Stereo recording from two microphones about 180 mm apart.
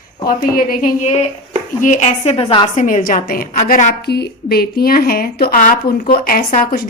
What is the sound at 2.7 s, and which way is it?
A woman's voice, 45° left (ahead or behind).